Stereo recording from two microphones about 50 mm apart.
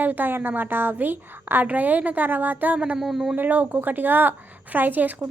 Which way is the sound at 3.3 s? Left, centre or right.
Right.